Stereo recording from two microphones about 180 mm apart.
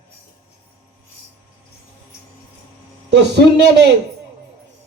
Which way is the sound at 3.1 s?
70° right (ahead or behind).